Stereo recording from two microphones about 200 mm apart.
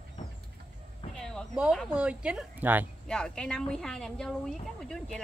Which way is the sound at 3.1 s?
5° left (ahead or behind).